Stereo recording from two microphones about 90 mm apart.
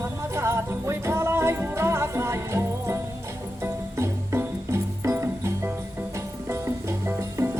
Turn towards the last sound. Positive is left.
turn(degrees=-30)  # may be behind; listen again after turning